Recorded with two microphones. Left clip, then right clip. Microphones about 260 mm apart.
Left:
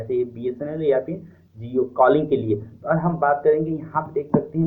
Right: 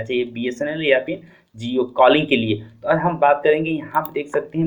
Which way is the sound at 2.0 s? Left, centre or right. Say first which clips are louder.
Right 3 dB; right.